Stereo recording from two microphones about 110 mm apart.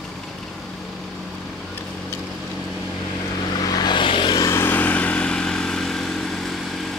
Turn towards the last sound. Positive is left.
turn(degrees=5)  # may be behind; listen again after turning